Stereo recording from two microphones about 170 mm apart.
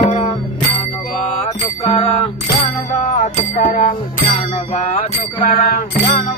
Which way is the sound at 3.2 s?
45° left (ahead or behind).